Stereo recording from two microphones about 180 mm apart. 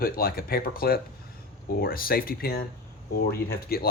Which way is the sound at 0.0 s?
55° left (ahead or behind).